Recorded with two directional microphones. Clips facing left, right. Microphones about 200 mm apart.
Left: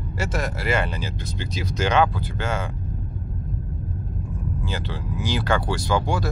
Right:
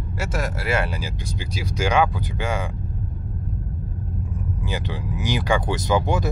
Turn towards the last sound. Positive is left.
turn(degrees=-20)  # may be behind; listen again after turning